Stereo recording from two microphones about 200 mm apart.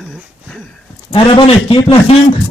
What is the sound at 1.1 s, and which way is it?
Speech, 25° left (ahead or behind).